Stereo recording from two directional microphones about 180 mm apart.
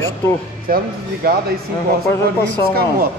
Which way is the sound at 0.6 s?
55° right (ahead or behind).